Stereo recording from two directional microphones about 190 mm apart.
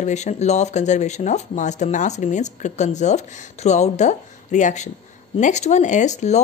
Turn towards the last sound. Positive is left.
turn(degrees=35)  # may be behind; listen again after turning